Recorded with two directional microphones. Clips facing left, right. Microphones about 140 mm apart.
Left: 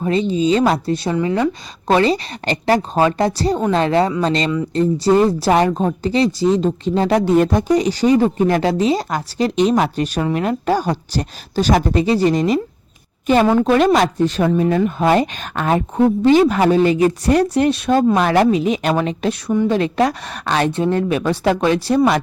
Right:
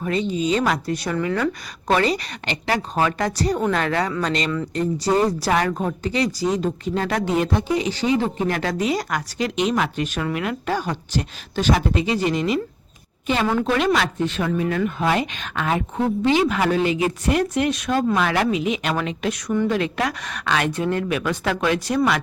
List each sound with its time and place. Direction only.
0.0 s speech: 30° left (ahead or behind)
7.3 s a woman's voice: 45° left (ahead or behind)